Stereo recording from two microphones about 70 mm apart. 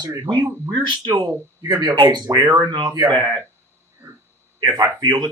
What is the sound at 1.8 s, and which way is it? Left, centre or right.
Speech, right.